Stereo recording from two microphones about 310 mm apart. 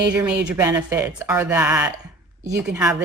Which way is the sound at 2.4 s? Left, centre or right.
Right.